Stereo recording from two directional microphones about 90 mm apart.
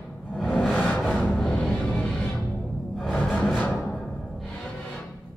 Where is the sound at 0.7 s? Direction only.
15° left (ahead or behind).